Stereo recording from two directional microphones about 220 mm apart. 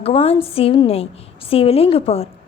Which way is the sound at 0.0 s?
25° left (ahead or behind).